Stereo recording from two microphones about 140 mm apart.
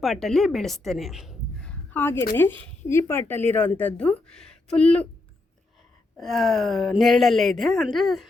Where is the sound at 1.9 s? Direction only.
15° left (ahead or behind).